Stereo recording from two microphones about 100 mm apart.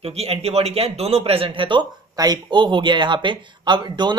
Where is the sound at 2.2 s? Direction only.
45° right (ahead or behind).